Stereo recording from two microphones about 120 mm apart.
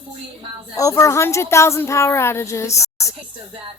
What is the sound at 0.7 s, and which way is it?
Speech, 25° left (ahead or behind).